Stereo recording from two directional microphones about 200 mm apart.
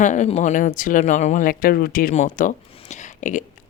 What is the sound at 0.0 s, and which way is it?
Speech, 35° left (ahead or behind).